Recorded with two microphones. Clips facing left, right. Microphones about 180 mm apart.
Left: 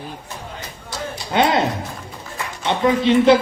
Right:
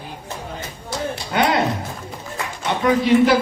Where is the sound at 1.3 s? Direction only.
25° left (ahead or behind).